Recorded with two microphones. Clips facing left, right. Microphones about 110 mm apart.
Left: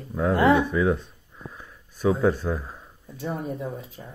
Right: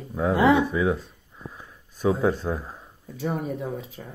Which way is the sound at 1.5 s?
20° right (ahead or behind).